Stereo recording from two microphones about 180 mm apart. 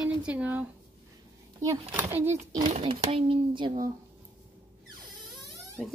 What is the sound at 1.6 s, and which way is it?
Speech, 15° right (ahead or behind).